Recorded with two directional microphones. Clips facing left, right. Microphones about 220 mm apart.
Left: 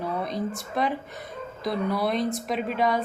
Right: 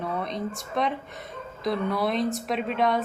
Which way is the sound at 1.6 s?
Centre (ahead or behind).